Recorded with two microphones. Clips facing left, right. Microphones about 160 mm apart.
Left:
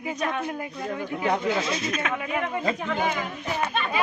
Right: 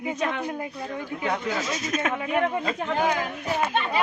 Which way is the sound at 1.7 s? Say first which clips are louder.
Right 1 dB; 45° right (ahead or behind).